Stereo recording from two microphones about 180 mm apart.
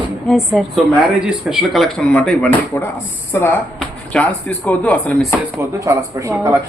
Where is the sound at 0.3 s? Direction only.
Centre (ahead or behind).